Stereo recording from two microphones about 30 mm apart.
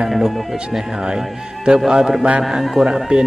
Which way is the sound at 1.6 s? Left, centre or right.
Right.